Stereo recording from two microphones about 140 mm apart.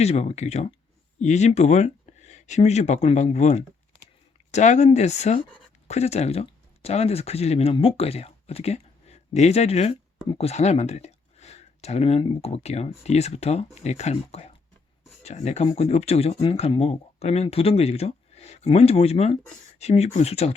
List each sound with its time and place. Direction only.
0.0 s speech: 50° left (ahead or behind)